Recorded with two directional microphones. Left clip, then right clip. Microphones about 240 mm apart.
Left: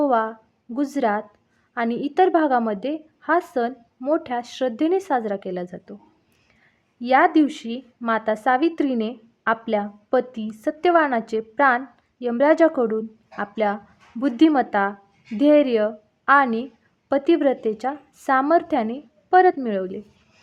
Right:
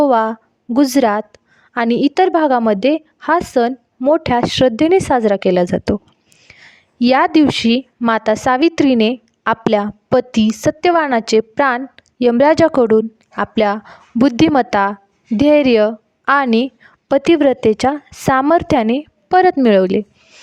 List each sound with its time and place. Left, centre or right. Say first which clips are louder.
0.0 s a woman's voice: right 7 dB; right